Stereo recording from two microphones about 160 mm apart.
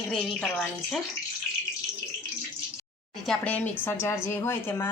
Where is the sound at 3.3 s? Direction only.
10° left (ahead or behind).